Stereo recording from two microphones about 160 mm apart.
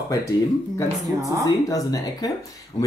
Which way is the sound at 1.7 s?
25° left (ahead or behind).